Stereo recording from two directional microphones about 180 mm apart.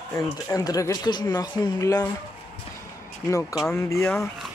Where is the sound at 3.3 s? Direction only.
20° left (ahead or behind).